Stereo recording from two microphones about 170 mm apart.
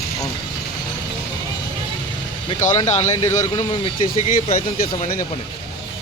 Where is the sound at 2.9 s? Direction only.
40° left (ahead or behind).